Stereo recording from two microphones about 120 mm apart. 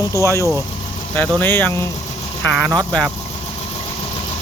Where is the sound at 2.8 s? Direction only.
5° left (ahead or behind).